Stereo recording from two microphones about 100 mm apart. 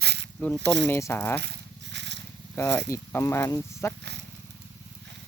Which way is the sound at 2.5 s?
25° left (ahead or behind).